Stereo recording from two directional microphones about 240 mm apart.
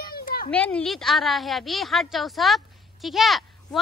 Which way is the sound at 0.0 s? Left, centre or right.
Left.